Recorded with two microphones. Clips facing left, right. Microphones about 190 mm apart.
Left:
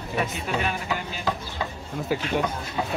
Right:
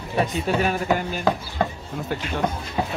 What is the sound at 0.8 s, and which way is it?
Speech, 50° right (ahead or behind).